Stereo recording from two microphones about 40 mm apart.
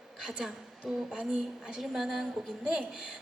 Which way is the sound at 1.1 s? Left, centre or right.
Centre.